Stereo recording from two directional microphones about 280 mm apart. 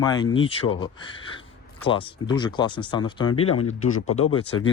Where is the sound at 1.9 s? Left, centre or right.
Centre.